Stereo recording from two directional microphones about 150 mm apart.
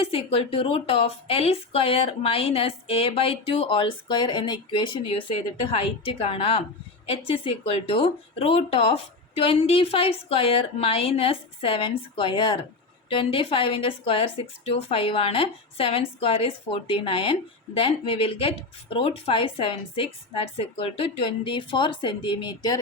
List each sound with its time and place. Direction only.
0.0 s speech: 40° left (ahead or behind)